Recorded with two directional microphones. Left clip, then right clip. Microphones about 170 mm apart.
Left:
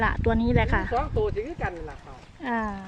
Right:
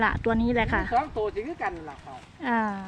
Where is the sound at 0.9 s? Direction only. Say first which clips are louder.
Even; 55° right (ahead or behind).